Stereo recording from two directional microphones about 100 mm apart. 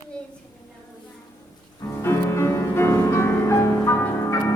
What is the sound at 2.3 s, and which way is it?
Music, 25° left (ahead or behind).